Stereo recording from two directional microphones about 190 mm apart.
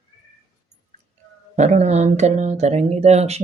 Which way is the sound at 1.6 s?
35° right (ahead or behind).